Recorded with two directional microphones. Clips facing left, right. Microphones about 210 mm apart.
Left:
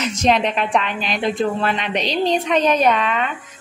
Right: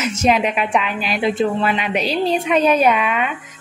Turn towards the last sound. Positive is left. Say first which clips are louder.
# right 1 dB
turn(degrees=-10)  # may be behind; listen again after turning